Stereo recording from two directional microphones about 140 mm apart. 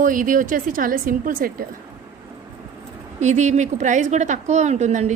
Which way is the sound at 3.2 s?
55° right (ahead or behind).